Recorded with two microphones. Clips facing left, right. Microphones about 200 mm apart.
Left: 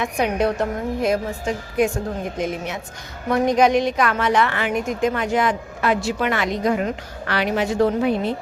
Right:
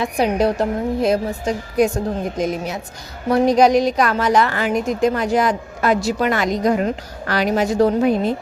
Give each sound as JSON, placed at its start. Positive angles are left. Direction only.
{"t": 0.0, "sound": "a woman's voice", "side_deg": -35}